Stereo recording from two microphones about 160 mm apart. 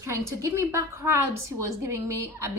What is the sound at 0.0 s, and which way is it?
A woman's voice, 15° right (ahead or behind).